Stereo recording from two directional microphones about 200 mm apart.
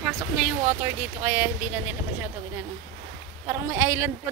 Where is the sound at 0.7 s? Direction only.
10° right (ahead or behind).